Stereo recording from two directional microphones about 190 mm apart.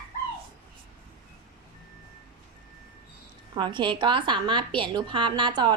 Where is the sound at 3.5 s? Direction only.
25° right (ahead or behind).